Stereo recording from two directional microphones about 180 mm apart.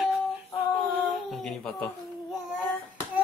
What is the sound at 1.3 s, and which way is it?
Babbling, centre (ahead or behind).